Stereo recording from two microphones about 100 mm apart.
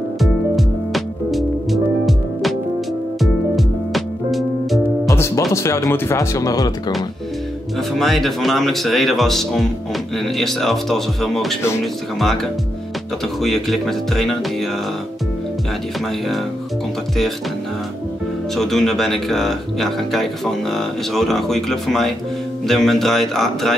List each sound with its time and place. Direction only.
0.2 s music: centre (ahead or behind)
5.0 s music: 30° left (ahead or behind)
5.5 s speech: 30° left (ahead or behind)
8.0 s speech: centre (ahead or behind)
13.4 s speech: centre (ahead or behind)
18.6 s speech: 5° left (ahead or behind)